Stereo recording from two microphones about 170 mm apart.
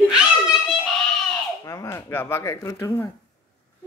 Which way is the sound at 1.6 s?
15° left (ahead or behind).